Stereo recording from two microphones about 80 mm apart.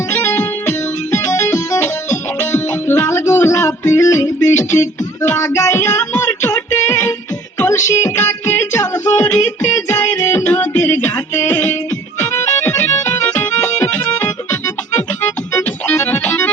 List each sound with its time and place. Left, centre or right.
0.1 s music: left
15.9 s music: left